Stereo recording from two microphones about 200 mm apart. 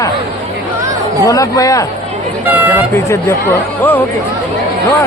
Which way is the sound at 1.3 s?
15° left (ahead or behind).